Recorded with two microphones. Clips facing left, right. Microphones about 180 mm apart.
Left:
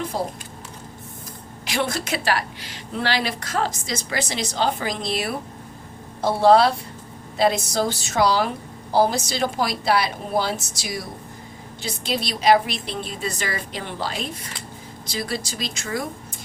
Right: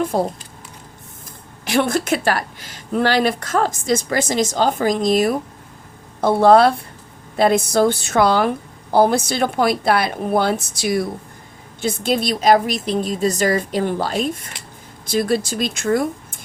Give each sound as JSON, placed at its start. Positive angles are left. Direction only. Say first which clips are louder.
{"t": 0.1, "sound": "speech", "louder": "right 6 dB", "side_deg": -50}
{"t": 1.6, "sound": "speech", "louder": "right 7 dB", "side_deg": -50}
{"t": 6.4, "sound": "a woman's voice", "louder": "right 3 dB", "side_deg": -55}